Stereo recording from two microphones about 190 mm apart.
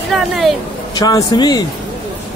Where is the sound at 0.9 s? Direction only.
20° left (ahead or behind).